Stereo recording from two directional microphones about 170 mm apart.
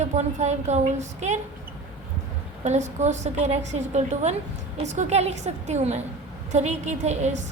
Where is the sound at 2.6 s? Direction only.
45° right (ahead or behind).